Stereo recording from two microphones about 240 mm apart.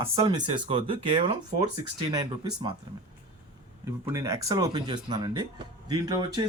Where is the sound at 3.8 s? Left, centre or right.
Centre.